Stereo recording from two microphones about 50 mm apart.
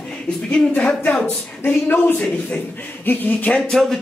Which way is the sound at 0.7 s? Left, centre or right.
Left.